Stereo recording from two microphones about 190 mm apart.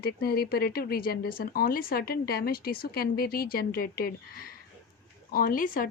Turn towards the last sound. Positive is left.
turn(degrees=50)  # may be behind; listen again after turning